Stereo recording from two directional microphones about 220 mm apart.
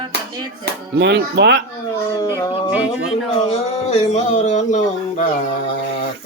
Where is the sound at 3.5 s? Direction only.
30° left (ahead or behind).